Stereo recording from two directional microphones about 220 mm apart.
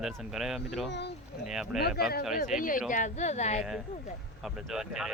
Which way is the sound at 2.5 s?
40° left (ahead or behind).